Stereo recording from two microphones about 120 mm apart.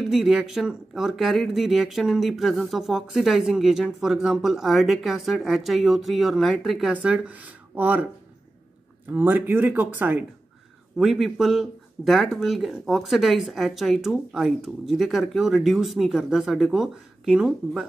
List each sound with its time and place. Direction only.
0.1 s speech: centre (ahead or behind)
6.9 s speech: 10° right (ahead or behind)
9.1 s speech: 15° right (ahead or behind)
11.0 s speech: centre (ahead or behind)